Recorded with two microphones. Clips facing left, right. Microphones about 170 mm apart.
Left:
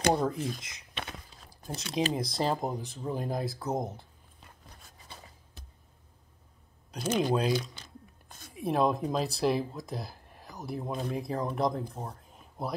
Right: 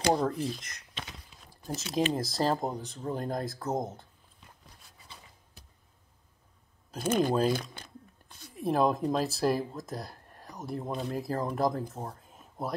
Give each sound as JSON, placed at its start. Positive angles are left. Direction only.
{"t": 0.1, "sound": "speech", "side_deg": 0}
{"t": 7.0, "sound": "speech", "side_deg": -50}
{"t": 7.8, "sound": "a sound", "side_deg": -55}
{"t": 8.5, "sound": "speech", "side_deg": 0}